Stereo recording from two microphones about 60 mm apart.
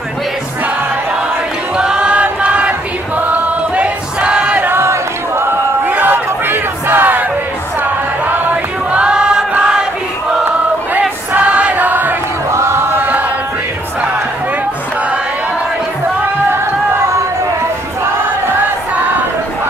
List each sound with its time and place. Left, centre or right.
1.8 s choir: centre
2.2 s chant: right
3.2 s a sound: right
4.6 s a sound: right
5.9 s crowd: right
8.3 s music: right
9.0 s choir: centre
9.6 s a sound: centre
11.0 s choir: right
12.4 s chant: right